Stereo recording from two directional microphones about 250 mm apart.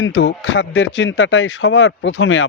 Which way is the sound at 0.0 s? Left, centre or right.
Left.